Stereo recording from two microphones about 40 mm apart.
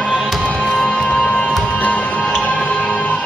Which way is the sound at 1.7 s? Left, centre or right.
Left.